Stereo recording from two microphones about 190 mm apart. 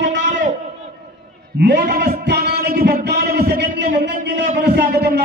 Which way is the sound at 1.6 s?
60° right (ahead or behind).